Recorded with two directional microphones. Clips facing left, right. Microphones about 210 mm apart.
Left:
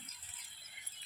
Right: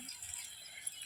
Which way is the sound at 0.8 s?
50° right (ahead or behind).